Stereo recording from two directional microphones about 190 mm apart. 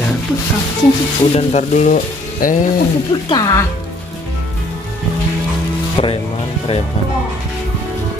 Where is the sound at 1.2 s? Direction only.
35° left (ahead or behind).